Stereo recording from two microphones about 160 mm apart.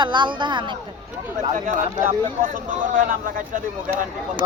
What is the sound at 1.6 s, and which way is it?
Speech, 55° right (ahead or behind).